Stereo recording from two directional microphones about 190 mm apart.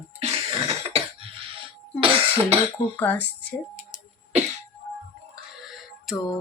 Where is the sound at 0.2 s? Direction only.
35° right (ahead or behind).